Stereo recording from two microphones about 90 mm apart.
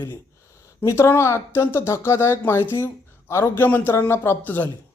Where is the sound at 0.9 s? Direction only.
30° left (ahead or behind).